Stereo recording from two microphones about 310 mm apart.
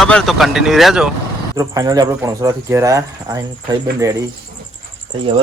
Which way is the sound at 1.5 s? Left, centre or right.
Centre.